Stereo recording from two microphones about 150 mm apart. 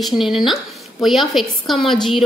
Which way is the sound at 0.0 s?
Centre (ahead or behind).